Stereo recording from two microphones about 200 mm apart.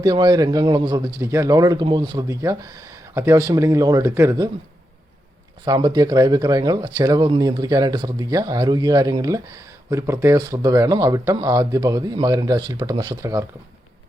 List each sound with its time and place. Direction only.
0.0 s speech: 20° right (ahead or behind)
5.6 s speech: 20° right (ahead or behind)